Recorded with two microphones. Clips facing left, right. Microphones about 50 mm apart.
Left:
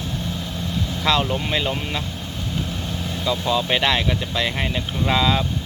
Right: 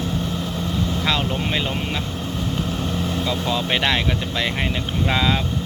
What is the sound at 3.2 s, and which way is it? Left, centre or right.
Speech, right.